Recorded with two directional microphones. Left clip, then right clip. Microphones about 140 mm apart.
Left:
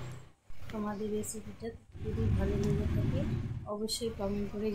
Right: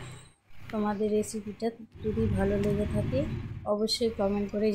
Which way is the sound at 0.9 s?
40° right (ahead or behind).